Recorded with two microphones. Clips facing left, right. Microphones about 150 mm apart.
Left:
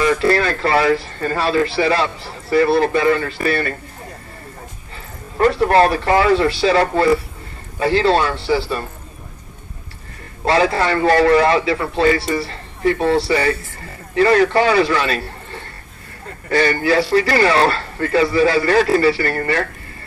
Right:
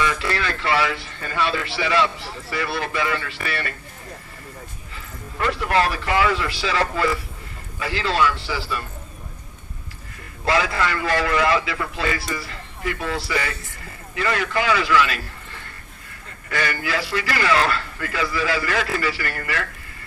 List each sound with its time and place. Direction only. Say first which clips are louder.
0.0 s speech: left 8 dB; 40° left (ahead or behind)
4.9 s speech: left 9 dB; 35° left (ahead or behind)
10.4 s a man's voice: left 6 dB; 35° left (ahead or behind)